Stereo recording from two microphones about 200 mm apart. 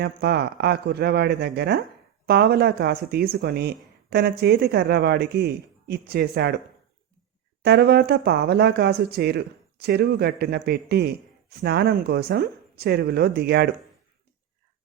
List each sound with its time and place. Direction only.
0.0 s speech: 55° right (ahead or behind)
7.6 s speech: 55° right (ahead or behind)